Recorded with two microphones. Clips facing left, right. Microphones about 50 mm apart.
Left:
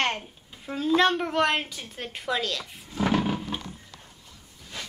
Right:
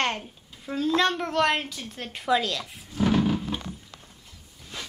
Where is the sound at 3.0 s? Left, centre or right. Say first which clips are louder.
Right 2 dB; left.